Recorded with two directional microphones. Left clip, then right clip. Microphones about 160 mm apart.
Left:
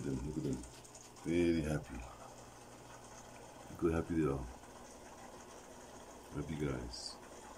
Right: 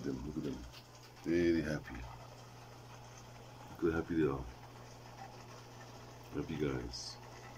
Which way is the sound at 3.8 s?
5° left (ahead or behind).